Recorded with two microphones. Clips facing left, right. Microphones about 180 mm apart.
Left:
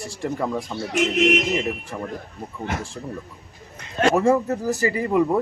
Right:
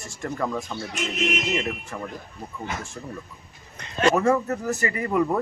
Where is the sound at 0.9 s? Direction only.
65° left (ahead or behind).